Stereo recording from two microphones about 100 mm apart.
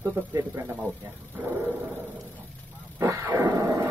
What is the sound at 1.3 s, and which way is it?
Speech, 15° right (ahead or behind).